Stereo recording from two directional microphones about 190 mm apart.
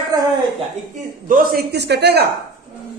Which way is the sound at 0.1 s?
20° right (ahead or behind).